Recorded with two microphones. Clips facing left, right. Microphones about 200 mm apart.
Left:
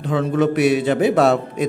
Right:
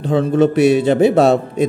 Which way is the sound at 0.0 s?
30° right (ahead or behind).